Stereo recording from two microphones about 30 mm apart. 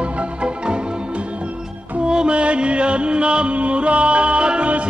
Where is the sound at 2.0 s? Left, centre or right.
Right.